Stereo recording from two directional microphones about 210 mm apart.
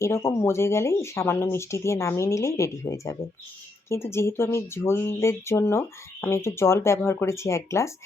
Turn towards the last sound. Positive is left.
turn(degrees=15)  # may be behind; listen again after turning